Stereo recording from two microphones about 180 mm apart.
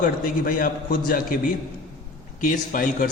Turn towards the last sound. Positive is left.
turn(degrees=50)  # may be behind; listen again after turning